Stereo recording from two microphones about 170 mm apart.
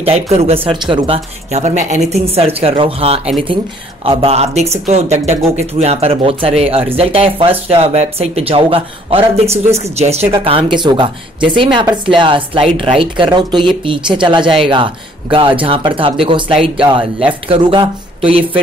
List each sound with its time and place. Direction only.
0.0 s speech: 35° right (ahead or behind)